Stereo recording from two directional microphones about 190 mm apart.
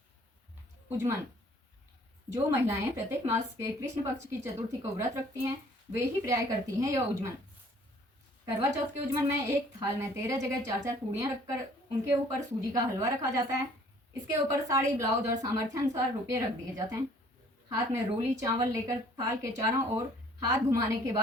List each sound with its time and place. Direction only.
0.9 s speech: 15° right (ahead or behind)
2.3 s a woman's voice: 15° right (ahead or behind)
9.5 s a woman's voice: 15° right (ahead or behind)